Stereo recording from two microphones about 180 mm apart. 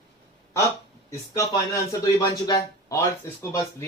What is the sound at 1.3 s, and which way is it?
Speech, 15° left (ahead or behind).